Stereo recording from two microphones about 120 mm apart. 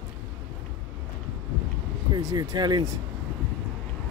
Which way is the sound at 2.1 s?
30° right (ahead or behind).